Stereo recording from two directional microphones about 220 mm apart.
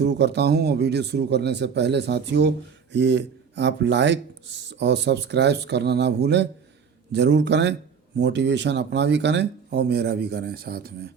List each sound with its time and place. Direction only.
0.0 s speech: 50° right (ahead or behind)